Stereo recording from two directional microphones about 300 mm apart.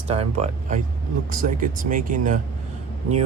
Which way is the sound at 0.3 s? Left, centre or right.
Right.